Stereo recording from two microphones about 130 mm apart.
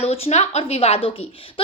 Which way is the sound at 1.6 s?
45° left (ahead or behind).